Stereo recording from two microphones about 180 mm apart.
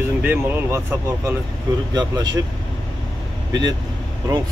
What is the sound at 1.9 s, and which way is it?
Speech, 20° right (ahead or behind).